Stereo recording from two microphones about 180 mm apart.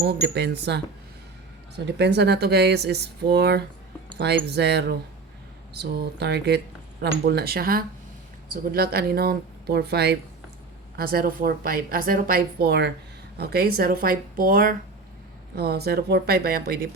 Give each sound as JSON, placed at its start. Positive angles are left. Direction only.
{"t": 0.0, "sound": "a woman's voice", "side_deg": -65}
{"t": 10.9, "sound": "a woman's voice", "side_deg": -55}
{"t": 15.5, "sound": "a woman's voice", "side_deg": -60}